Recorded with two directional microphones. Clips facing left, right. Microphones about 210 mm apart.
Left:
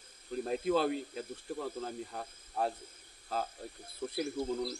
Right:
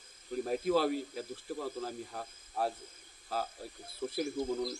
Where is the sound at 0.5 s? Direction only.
5° right (ahead or behind).